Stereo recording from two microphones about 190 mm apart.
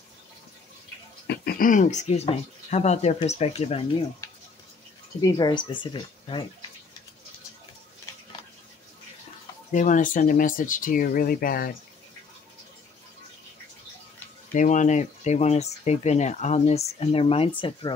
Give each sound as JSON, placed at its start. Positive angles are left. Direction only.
{"t": 1.2, "sound": "speech", "side_deg": 55}
{"t": 5.2, "sound": "speech", "side_deg": 20}
{"t": 9.7, "sound": "speech", "side_deg": 40}
{"t": 14.5, "sound": "speech", "side_deg": 40}